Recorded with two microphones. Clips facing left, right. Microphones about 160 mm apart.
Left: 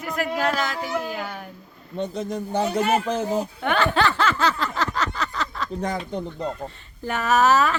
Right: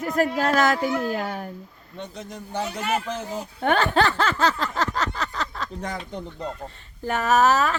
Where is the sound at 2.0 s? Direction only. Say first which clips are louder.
Left 9 dB; 35° left (ahead or behind).